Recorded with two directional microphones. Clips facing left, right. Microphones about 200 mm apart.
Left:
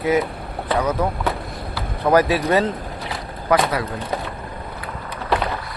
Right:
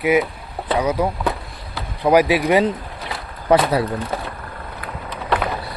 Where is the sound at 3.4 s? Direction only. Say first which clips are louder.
Right 3 dB; 30° right (ahead or behind).